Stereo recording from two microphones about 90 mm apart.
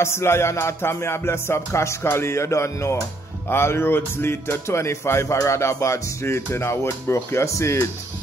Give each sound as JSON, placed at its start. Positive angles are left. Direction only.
{"t": 0.0, "sound": "speech", "side_deg": 30}